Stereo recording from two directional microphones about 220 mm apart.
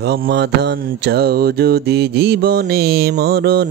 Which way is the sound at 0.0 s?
50° right (ahead or behind).